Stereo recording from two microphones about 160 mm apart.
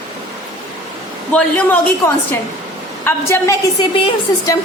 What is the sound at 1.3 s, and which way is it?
A woman's voice, 10° left (ahead or behind).